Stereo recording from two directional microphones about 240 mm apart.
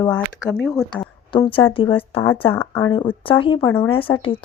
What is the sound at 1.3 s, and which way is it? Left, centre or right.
Speech, left.